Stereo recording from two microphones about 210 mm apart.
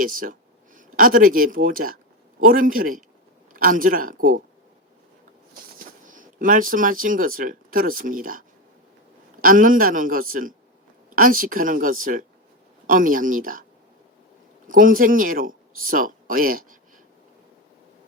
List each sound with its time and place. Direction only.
0.0 s a sound: 40° right (ahead or behind)
0.9 s speech: 40° right (ahead or behind)
6.1 s speech: 40° right (ahead or behind)
14.7 s speech: 40° right (ahead or behind)